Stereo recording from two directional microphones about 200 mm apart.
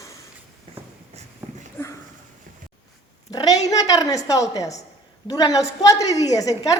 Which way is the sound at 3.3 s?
20° left (ahead or behind).